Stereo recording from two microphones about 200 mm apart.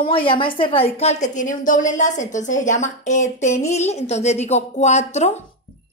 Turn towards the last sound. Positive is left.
turn(degrees=35)  # may be behind; listen again after turning